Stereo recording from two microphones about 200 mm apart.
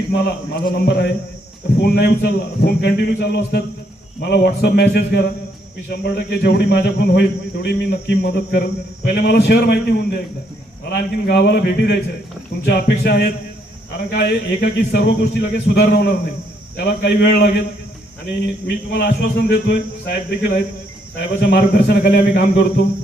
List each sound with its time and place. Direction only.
0.1 s speech: 50° left (ahead or behind)
18.9 s speech: 50° left (ahead or behind)